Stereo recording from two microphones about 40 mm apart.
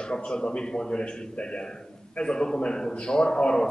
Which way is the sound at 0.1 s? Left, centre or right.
Left.